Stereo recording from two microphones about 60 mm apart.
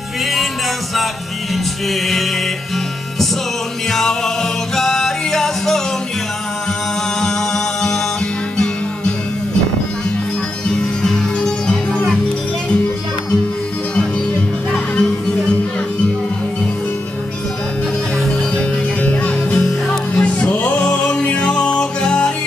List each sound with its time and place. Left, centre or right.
1.5 s music: centre
3.9 s music: centre
7.2 s music: centre
10.7 s music: centre
14.7 s music: centre
18.6 s music: centre